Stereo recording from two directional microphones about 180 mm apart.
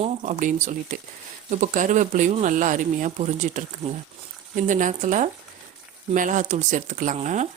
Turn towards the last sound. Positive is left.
turn(degrees=-40)  # may be behind; listen again after turning